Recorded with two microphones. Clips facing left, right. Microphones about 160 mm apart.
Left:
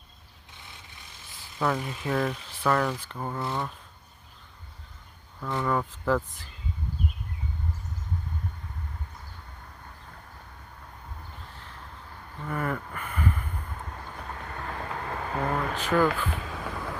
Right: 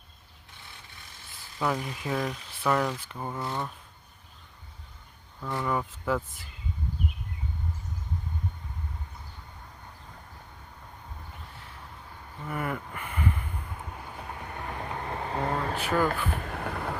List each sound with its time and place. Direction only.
1.6 s speech: 15° right (ahead or behind)
3.4 s speech: 15° left (ahead or behind)
5.6 s speech: 10° right (ahead or behind)
12.5 s a sound: 10° right (ahead or behind)
13.9 s vehicle: 15° right (ahead or behind); by 15.8 s 30° right (ahead or behind)
16.0 s vehicle: 55° right (ahead or behind); by 17.0 s 70° right (ahead or behind)